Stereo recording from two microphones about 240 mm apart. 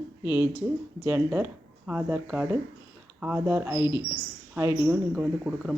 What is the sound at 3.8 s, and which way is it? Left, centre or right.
Speech, centre.